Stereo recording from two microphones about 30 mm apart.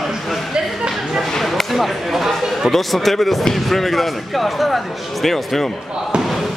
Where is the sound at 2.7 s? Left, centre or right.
Centre.